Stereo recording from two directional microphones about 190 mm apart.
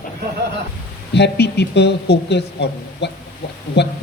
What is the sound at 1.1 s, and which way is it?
A man's voice, 60° left (ahead or behind).